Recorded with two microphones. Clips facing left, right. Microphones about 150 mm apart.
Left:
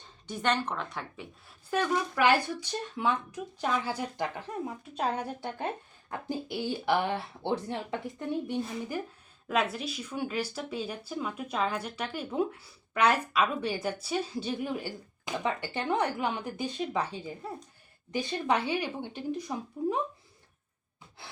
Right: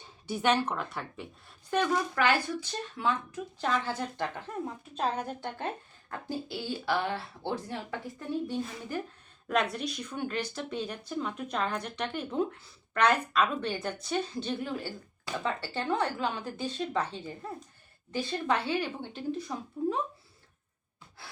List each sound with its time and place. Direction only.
0.0 s speech: 10° right (ahead or behind); by 9.0 s 15° left (ahead or behind)
9.5 s speech: 5° left (ahead or behind)